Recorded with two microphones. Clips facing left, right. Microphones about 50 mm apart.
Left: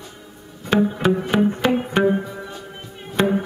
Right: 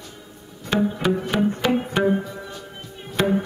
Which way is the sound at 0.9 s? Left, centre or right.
Centre.